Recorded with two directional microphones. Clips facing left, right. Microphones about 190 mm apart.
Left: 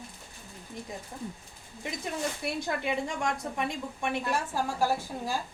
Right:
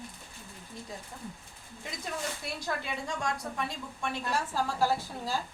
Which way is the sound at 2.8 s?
20° left (ahead or behind).